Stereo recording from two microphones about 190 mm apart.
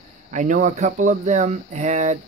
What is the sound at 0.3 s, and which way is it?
Speech, 40° right (ahead or behind).